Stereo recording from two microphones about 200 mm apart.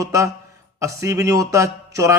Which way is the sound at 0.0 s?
15° right (ahead or behind).